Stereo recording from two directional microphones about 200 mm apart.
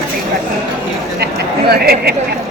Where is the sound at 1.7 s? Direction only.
50° right (ahead or behind).